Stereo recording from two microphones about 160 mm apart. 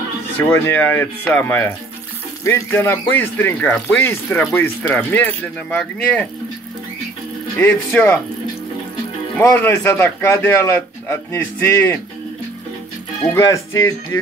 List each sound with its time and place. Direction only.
0.5 s a man's voice: 15° left (ahead or behind)
7.5 s a man's voice: 15° left (ahead or behind)
9.4 s a man's voice: 15° left (ahead or behind)
13.3 s speech: 20° left (ahead or behind)